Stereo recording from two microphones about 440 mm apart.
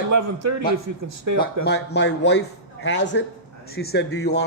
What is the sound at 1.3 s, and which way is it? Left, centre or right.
Speech, right.